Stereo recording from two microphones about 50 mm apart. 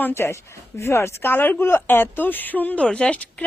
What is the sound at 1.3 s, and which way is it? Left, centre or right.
A woman's voice, left.